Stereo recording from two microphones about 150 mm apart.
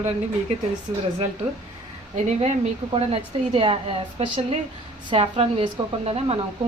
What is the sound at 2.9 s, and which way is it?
A woman's voice, 40° right (ahead or behind).